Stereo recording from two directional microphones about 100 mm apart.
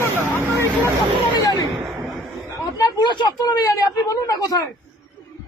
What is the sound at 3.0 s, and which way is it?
Speech, 50° left (ahead or behind).